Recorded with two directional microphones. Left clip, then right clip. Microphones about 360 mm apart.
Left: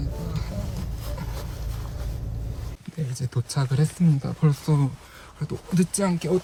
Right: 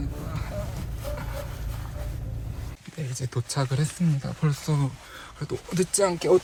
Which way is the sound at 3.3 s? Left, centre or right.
Centre.